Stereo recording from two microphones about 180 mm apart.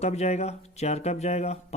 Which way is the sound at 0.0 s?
35° left (ahead or behind).